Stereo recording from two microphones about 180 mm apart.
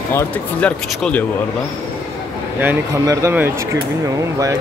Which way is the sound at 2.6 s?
15° right (ahead or behind).